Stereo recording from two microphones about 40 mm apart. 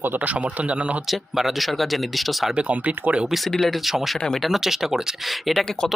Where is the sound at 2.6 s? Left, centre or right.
Right.